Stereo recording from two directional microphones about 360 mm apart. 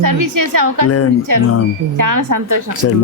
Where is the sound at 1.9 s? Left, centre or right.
Right.